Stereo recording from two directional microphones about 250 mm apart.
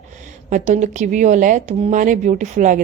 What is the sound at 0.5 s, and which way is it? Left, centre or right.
A woman's voice, right.